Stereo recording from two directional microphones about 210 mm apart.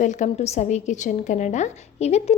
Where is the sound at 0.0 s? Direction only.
35° left (ahead or behind).